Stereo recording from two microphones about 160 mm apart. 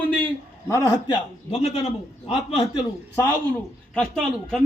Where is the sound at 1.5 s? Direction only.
40° left (ahead or behind).